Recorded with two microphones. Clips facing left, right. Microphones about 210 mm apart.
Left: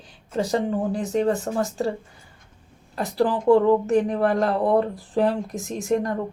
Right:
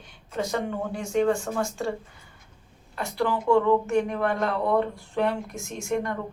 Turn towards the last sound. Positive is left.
turn(degrees=35)  # may be behind; listen again after turning